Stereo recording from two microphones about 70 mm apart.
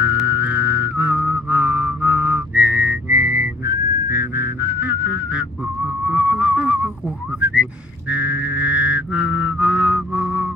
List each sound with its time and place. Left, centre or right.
0.3 s music: right
6.0 s a sound: right
7.3 s whistling: right
8.1 s music: right